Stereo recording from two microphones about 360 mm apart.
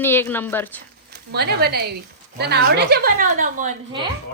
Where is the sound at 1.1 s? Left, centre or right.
Right.